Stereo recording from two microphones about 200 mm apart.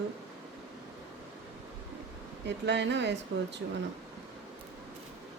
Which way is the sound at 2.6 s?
60° right (ahead or behind).